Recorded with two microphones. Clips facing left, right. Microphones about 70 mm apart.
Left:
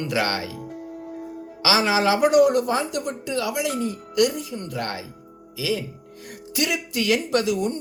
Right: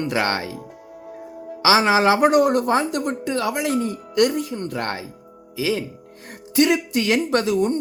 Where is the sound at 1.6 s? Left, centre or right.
Right.